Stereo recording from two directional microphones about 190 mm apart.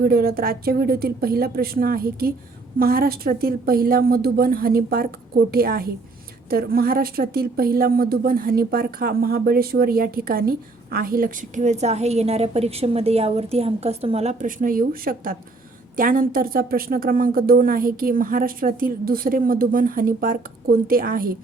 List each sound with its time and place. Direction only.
0.0 s a woman's voice: 55° right (ahead or behind)